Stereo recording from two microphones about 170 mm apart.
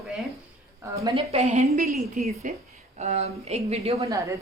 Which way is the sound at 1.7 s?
55° right (ahead or behind).